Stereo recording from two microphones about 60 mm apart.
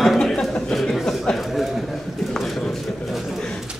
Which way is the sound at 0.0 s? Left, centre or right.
Centre.